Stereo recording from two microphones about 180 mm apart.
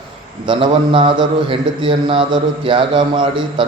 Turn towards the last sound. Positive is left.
turn(degrees=-25)  # may be behind; listen again after turning